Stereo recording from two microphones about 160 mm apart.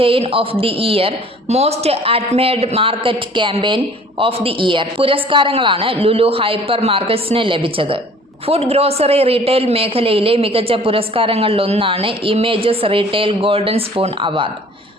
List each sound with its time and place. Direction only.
0.0 s a woman's voice: 35° right (ahead or behind)